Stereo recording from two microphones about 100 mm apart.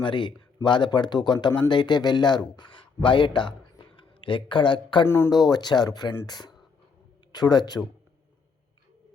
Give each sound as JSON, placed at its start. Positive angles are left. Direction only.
{"t": 0.0, "sound": "speech", "side_deg": 55}
{"t": 5.0, "sound": "speech", "side_deg": 25}
{"t": 5.3, "sound": "speech", "side_deg": 45}